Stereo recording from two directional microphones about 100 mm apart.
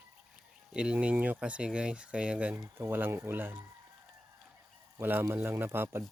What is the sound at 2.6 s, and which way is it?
Speech, 25° right (ahead or behind).